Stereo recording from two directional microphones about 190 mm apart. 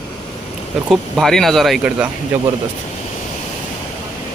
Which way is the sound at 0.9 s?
Centre (ahead or behind).